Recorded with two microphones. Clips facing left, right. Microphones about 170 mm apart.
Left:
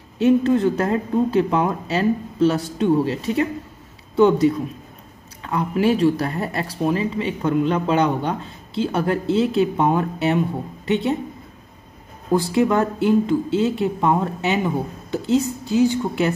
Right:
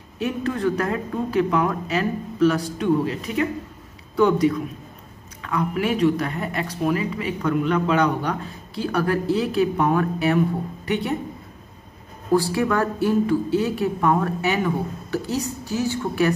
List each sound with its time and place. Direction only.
0.2 s speech: 25° left (ahead or behind)
12.3 s speech: 20° left (ahead or behind)